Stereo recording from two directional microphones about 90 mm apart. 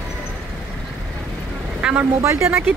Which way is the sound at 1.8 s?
10° right (ahead or behind).